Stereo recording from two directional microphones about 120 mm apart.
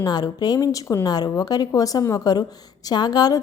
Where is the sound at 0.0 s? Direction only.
35° left (ahead or behind).